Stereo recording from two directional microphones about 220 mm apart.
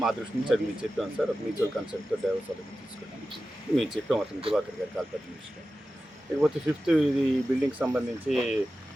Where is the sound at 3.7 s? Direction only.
Centre (ahead or behind).